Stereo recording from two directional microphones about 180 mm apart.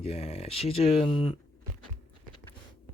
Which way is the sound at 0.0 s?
35° left (ahead or behind).